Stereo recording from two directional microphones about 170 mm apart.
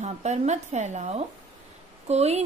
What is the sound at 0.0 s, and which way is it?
A woman's voice, 40° right (ahead or behind).